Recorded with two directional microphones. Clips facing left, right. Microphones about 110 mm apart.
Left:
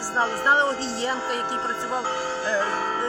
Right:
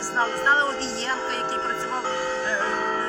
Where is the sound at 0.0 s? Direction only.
15° left (ahead or behind).